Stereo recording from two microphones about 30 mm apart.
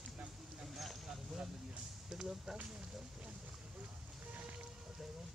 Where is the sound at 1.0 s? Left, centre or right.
Centre.